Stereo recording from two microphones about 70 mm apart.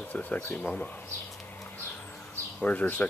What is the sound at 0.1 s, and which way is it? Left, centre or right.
Speech, left.